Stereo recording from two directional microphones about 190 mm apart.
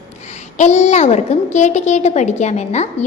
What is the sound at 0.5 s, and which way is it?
A woman's voice, 40° left (ahead or behind).